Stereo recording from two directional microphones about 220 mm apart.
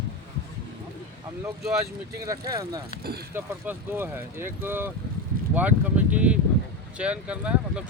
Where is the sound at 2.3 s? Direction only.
15° right (ahead or behind).